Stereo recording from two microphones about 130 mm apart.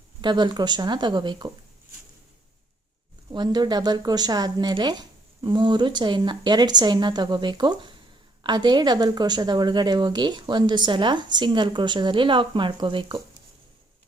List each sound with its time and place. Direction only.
0.2 s a woman's voice: 35° right (ahead or behind)
3.3 s a woman's voice: 35° right (ahead or behind)